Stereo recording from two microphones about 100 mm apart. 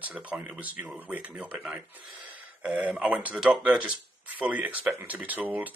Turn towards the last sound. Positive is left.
turn(degrees=-15)  # may be behind; listen again after turning